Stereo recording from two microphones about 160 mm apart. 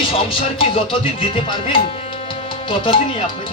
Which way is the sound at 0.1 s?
35° left (ahead or behind).